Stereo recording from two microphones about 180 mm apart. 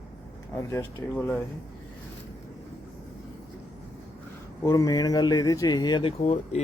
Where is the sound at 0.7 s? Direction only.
15° left (ahead or behind).